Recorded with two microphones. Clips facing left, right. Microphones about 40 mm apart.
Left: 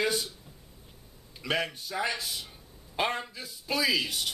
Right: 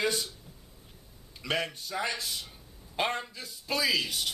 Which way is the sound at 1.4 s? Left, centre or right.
Centre.